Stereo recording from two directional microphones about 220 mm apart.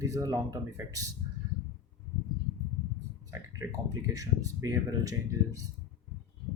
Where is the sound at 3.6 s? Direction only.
15° right (ahead or behind).